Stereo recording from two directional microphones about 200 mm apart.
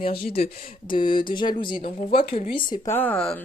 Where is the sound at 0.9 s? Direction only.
25° left (ahead or behind).